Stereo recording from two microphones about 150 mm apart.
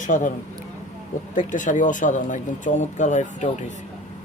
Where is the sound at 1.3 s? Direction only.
60° left (ahead or behind).